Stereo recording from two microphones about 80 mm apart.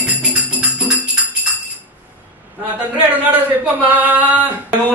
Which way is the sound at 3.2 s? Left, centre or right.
Centre.